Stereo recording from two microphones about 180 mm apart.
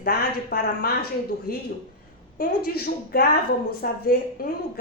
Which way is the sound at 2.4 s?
55° left (ahead or behind).